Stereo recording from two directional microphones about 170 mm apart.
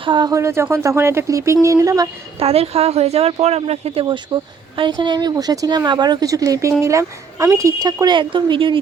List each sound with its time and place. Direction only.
0.0 s speech: 25° right (ahead or behind)
2.4 s speech: 35° right (ahead or behind)